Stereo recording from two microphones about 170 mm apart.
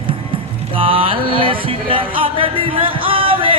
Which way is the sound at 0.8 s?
30° right (ahead or behind).